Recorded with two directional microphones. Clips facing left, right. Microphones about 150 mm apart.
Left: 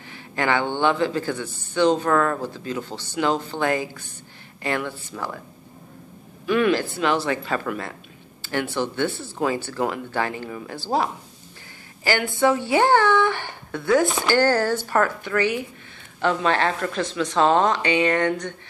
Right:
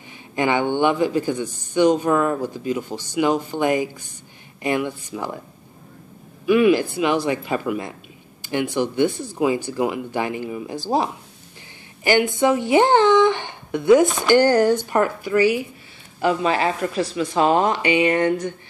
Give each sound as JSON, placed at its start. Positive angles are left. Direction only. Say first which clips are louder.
{"t": 0.4, "sound": "speech", "louder": "right 3 dB", "side_deg": -15}
{"t": 6.4, "sound": "speech", "louder": "right 4 dB", "side_deg": -10}